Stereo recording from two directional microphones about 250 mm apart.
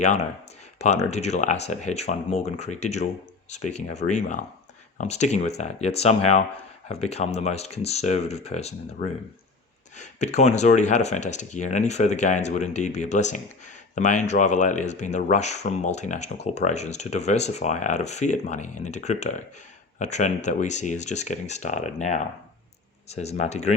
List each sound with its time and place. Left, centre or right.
0.0 s speech: left
10.0 s speech: left